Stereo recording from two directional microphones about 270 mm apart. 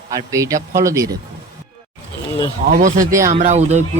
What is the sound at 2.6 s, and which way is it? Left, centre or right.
A man's voice, right.